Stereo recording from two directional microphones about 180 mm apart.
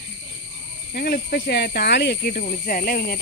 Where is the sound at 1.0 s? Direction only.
60° left (ahead or behind).